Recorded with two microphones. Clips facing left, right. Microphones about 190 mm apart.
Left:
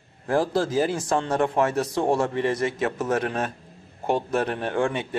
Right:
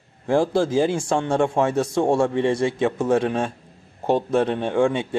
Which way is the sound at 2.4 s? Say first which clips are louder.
Right 4 dB; 25° right (ahead or behind).